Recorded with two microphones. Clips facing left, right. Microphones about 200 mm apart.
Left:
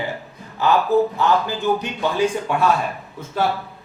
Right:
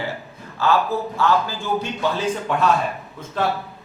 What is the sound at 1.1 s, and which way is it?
A man's voice, 20° left (ahead or behind).